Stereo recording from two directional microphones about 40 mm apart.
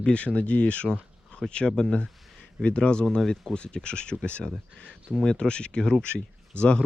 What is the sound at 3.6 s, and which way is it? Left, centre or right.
Speech, left.